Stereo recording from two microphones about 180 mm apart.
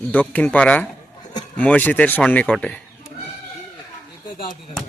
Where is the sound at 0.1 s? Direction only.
10° left (ahead or behind).